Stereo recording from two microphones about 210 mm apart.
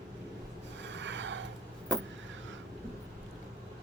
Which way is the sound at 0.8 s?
60° right (ahead or behind).